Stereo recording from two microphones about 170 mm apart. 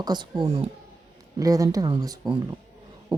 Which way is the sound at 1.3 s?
20° right (ahead or behind).